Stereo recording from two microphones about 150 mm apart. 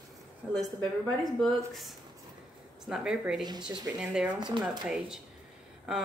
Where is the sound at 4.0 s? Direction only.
5° right (ahead or behind).